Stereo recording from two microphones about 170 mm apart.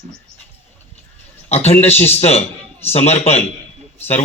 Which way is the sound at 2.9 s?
40° left (ahead or behind).